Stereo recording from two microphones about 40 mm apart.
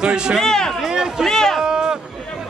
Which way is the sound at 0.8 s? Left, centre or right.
Centre.